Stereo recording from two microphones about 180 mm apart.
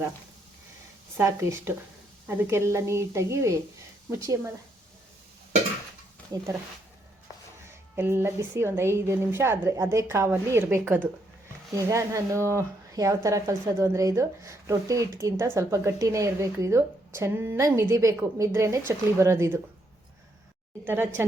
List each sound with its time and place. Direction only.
1.1 s speech: 15° right (ahead or behind)
6.3 s speech: 20° right (ahead or behind)
7.9 s speech: 15° right (ahead or behind)
20.8 s speech: 10° right (ahead or behind)